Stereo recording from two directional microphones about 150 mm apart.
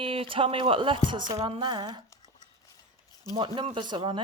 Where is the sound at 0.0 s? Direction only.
35° right (ahead or behind).